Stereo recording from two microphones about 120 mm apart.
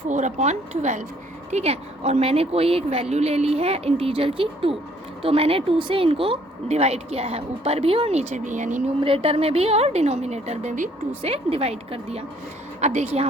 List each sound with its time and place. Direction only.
0.1 s speech: 85° right
1.5 s speech: 65° right (ahead or behind); by 8.8 s 90° right
9.0 s speech: 50° right (ahead or behind); by 10.8 s 80° right
11.2 s speech: 60° right (ahead or behind)
12.8 s a woman's voice: 70° right (ahead or behind)